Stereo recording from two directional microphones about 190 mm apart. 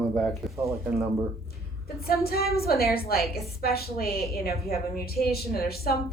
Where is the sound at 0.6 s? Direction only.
15° right (ahead or behind).